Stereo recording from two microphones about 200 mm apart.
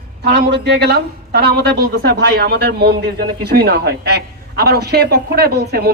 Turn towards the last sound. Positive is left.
turn(degrees=-50)  # may be behind; listen again after turning